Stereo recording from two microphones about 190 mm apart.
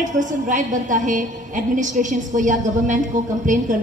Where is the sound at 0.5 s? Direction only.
40° right (ahead or behind).